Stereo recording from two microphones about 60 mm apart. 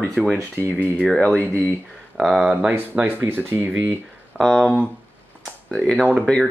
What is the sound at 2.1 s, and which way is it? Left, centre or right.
Speech, centre.